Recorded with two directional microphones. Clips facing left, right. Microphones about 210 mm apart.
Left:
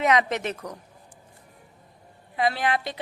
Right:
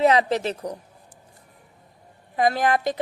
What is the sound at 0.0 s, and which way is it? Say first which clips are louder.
Speech: right 4 dB; 30° right (ahead or behind).